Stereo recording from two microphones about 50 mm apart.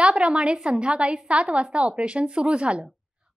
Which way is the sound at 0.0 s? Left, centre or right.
Centre.